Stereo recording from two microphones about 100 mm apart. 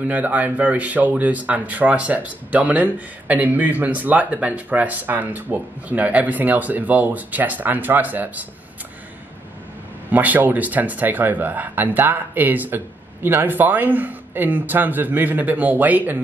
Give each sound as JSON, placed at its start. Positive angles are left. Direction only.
{"t": 0.0, "sound": "speech", "side_deg": -15}
{"t": 10.1, "sound": "speech", "side_deg": -15}